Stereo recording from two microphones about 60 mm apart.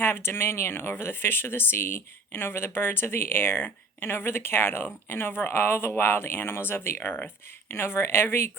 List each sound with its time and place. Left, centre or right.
0.0 s speech: left